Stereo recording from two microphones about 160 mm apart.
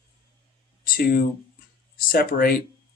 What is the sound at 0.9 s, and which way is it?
Speech, 65° left (ahead or behind).